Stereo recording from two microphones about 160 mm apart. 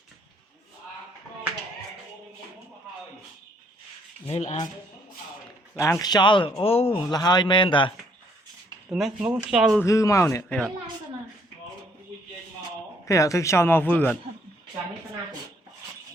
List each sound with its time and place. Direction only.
4.3 s speech: 40° left (ahead or behind)
5.7 s speech: 20° left (ahead or behind); by 7.0 s 35° left (ahead or behind)
7.1 s speech: 25° left (ahead or behind)
8.9 s speech: 5° right (ahead or behind)
9.8 s speech: 20° left (ahead or behind)
13.1 s speech: 20° left (ahead or behind)